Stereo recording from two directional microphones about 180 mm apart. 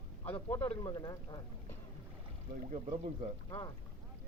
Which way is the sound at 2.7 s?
35° right (ahead or behind).